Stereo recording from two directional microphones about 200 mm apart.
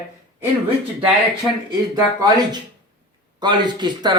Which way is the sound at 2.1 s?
20° right (ahead or behind).